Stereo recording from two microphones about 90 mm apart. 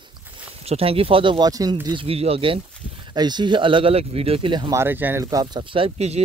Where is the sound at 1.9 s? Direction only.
90° right.